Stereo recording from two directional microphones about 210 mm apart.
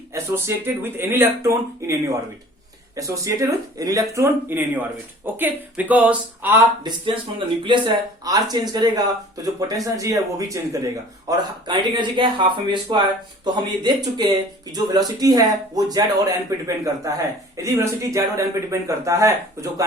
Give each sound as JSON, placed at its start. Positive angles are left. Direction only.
{"t": 0.1, "sound": "speech", "side_deg": -15}